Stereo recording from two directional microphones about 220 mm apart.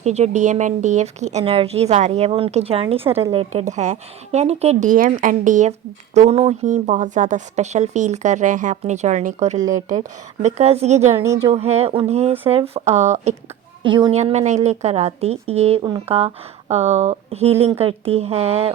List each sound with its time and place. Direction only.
0.0 s a woman's voice: 30° right (ahead or behind)
11.2 s speech: 15° right (ahead or behind)
11.5 s a woman's voice: 30° right (ahead or behind)